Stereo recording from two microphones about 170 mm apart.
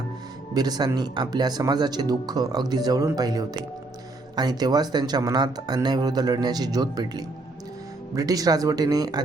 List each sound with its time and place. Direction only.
0.5 s speech: 25° right (ahead or behind)